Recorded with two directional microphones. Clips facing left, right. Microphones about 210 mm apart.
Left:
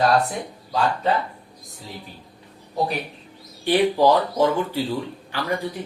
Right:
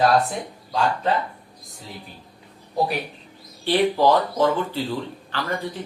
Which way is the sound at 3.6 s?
15° left (ahead or behind).